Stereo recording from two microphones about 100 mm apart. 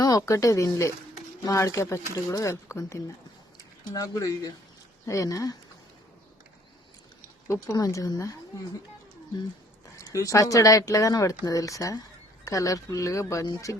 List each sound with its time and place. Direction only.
0.0 s speech: 35° left (ahead or behind)
7.4 s speech: 35° left (ahead or behind)
10.0 s speech: 35° left (ahead or behind)